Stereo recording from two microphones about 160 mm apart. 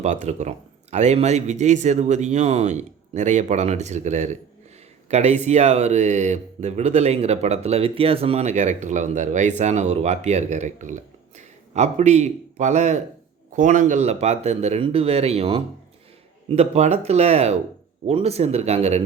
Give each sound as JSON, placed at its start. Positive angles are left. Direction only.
{"t": 0.0, "sound": "speech", "side_deg": -50}